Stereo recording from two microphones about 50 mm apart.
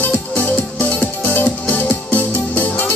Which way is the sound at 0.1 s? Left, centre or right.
Left.